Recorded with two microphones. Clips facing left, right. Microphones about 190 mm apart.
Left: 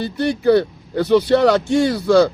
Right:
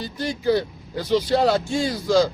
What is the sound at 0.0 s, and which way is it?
Speech, 65° left (ahead or behind).